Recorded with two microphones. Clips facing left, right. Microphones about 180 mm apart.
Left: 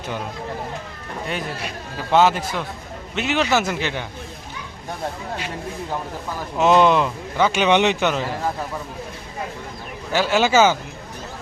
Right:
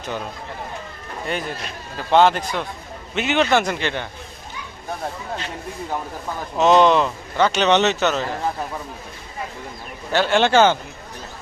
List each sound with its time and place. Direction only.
2.1 s a man's voice: 5° left (ahead or behind)
6.6 s a man's voice: 10° left (ahead or behind)
10.1 s a man's voice: 5° left (ahead or behind)